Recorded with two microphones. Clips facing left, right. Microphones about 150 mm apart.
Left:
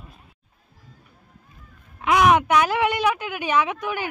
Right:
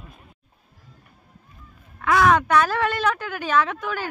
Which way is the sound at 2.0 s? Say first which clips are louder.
Left 1 dB; 15° left (ahead or behind).